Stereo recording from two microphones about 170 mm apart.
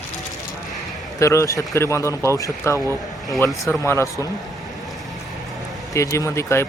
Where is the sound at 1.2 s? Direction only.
20° left (ahead or behind).